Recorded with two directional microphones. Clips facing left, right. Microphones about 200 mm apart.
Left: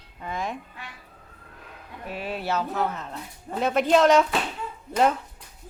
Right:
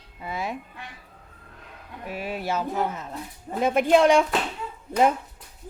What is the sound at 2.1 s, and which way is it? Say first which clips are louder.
Speech: even; 10° right (ahead or behind).